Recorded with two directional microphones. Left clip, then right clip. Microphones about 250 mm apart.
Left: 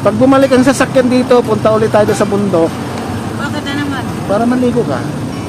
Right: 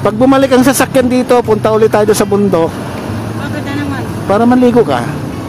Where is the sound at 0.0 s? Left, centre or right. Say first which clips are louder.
Even; right.